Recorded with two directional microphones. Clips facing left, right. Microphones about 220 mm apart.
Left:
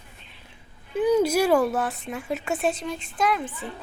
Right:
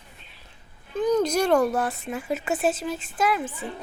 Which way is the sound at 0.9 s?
10° left (ahead or behind).